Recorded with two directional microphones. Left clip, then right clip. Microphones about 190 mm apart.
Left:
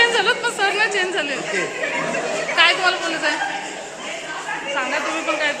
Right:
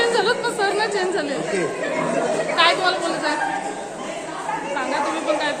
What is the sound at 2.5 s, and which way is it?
Chatter, 35° left (ahead or behind).